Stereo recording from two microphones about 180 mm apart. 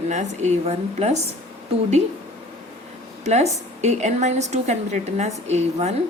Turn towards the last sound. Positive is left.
turn(degrees=-40)  # may be behind; listen again after turning